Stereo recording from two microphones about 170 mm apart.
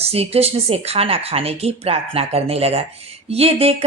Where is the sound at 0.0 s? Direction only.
35° right (ahead or behind).